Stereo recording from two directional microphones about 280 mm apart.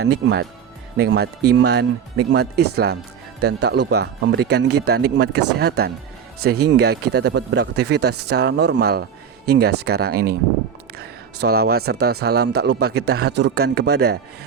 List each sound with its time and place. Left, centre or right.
0.1 s speech: right